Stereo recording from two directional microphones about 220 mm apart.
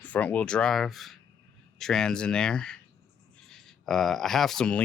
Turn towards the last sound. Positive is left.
turn(degrees=5)  # may be behind; listen again after turning